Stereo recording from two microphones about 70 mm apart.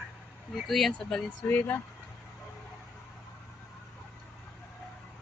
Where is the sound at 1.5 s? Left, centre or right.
Left.